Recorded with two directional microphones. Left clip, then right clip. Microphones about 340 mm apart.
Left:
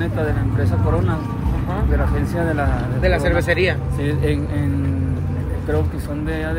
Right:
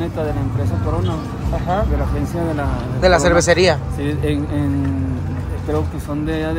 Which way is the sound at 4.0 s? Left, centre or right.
Centre.